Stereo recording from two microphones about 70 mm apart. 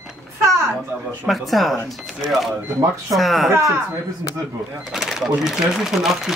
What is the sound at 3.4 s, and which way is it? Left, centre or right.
Speech, right.